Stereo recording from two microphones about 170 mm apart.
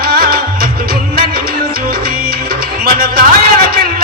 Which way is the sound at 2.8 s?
60° right (ahead or behind).